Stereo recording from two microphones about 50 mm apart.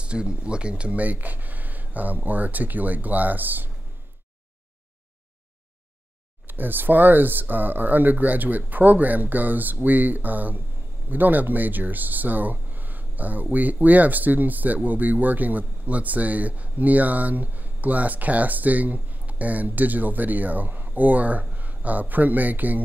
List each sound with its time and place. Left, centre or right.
0.0 s speech: right
6.4 s speech: right